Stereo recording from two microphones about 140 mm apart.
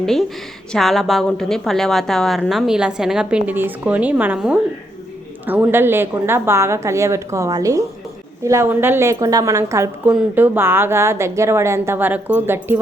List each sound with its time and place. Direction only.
0.0 s a woman's voice: centre (ahead or behind); by 12.8 s 15° right (ahead or behind)